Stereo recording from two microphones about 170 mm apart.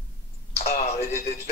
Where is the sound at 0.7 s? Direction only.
55° left (ahead or behind).